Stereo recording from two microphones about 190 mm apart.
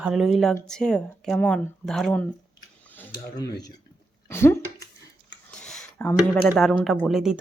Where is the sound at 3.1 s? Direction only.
20° left (ahead or behind).